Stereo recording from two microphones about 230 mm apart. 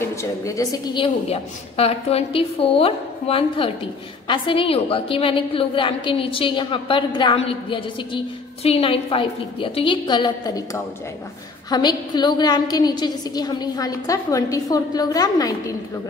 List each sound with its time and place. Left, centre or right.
0.1 s a woman's voice: centre